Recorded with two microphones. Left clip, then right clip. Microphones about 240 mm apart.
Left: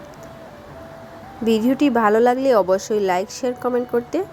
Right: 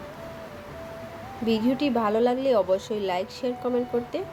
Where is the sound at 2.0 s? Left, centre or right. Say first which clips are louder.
Left 8 dB; left.